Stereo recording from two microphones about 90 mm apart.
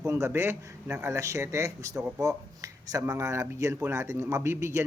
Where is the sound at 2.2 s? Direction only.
35° right (ahead or behind).